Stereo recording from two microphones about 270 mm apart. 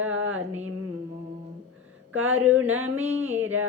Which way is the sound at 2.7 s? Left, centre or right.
Centre.